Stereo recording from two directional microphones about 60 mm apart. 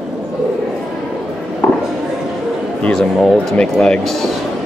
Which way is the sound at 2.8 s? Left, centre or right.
Centre.